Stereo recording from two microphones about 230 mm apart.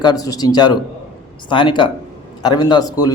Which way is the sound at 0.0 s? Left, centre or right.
Centre.